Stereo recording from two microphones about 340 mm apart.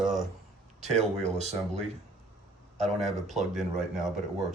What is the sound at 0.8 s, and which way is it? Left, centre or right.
Speech, centre.